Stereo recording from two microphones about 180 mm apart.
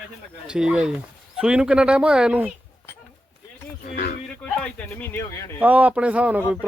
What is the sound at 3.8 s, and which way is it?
Speech, 55° left (ahead or behind).